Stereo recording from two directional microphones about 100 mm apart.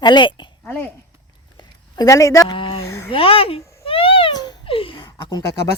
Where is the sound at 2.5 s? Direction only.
60° left (ahead or behind).